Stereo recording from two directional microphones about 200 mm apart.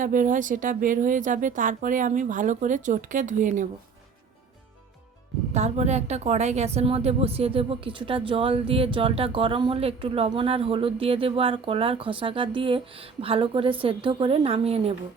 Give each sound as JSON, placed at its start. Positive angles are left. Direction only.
{"t": 0.0, "sound": "speech", "side_deg": -40}
{"t": 5.5, "sound": "a woman's voice", "side_deg": -35}